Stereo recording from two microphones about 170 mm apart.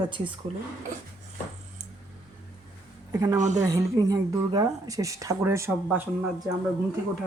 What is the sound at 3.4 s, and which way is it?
Speech, 45° right (ahead or behind).